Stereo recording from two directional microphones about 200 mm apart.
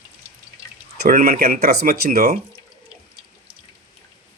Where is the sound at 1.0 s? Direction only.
45° right (ahead or behind).